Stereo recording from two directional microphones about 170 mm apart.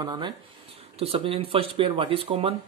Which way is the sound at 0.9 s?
35° right (ahead or behind).